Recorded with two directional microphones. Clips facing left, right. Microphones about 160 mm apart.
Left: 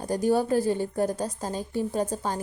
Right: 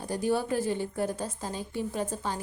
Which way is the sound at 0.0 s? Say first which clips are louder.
Left 5 dB; 40° left (ahead or behind).